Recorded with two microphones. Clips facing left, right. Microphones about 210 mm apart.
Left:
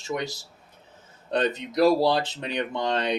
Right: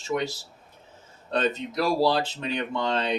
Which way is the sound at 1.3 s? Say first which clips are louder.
Left 1 dB; 20° left (ahead or behind).